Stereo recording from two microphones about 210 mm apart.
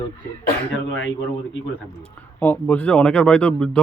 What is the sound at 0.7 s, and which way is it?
Speech, 65° left (ahead or behind).